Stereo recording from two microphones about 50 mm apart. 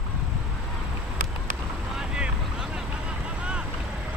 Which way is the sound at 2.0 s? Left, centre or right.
Centre.